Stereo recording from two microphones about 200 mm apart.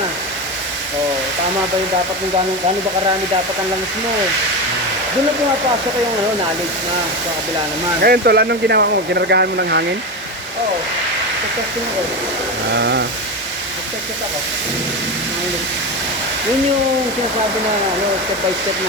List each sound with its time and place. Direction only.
8.0 s speech: 50° right (ahead or behind)
12.7 s speech: 60° right (ahead or behind)